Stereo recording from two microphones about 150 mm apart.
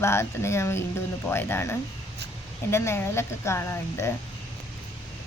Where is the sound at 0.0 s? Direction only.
15° left (ahead or behind).